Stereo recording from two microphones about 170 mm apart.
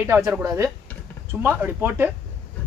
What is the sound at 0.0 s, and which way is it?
Speech, 15° right (ahead or behind).